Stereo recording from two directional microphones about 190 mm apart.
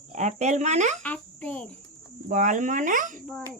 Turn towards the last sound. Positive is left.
turn(degrees=5)  # may be behind; listen again after turning